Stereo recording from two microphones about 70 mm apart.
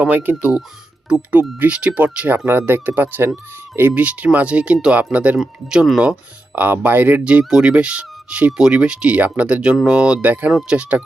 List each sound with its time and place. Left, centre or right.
0.0 s speech: right
1.0 s speech: centre
5.4 s speech: centre
6.6 s speech: right
10.2 s speech: right
10.5 s speech: centre
10.8 s speech: centre